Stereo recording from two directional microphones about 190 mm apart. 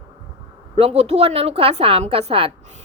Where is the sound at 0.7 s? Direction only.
30° right (ahead or behind).